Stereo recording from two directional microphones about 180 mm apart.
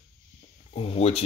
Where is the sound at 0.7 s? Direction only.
35° left (ahead or behind).